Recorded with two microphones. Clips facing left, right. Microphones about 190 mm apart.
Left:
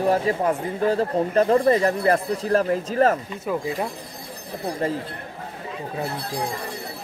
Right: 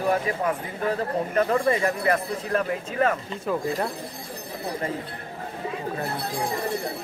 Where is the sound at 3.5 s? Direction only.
10° left (ahead or behind).